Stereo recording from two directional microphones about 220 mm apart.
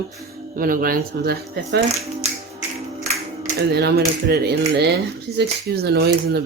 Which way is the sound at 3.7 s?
45° right (ahead or behind).